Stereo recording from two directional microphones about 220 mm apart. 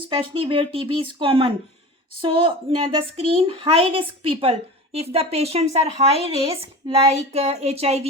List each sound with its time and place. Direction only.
0.1 s speech: 25° right (ahead or behind)